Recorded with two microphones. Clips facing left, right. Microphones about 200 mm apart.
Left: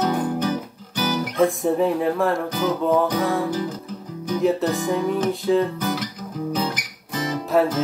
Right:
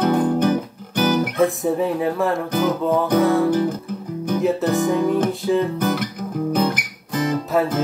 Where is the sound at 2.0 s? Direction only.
Centre (ahead or behind).